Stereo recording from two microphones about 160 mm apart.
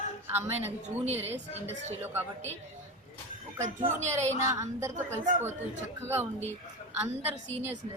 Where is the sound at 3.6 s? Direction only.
45° right (ahead or behind).